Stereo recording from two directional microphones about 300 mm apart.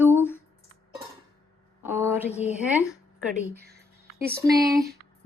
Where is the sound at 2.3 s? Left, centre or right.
Left.